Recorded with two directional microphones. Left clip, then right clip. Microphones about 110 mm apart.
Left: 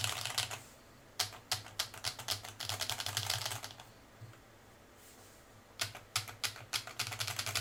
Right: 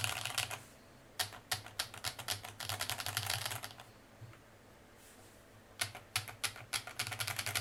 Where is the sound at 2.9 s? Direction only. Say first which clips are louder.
Left 2 dB; 20° right (ahead or behind).